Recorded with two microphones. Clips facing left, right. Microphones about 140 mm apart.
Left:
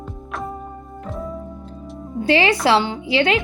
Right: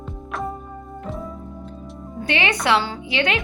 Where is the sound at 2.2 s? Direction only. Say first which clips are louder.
Left 6 dB; 30° left (ahead or behind).